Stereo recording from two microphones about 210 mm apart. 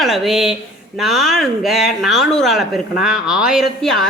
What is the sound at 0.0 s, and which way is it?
Speech, centre (ahead or behind).